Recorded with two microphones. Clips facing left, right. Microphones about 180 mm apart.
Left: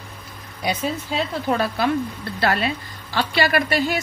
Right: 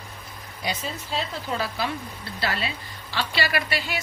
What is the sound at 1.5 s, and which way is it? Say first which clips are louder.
A woman's voice: left 9 dB; 60° left (ahead or behind).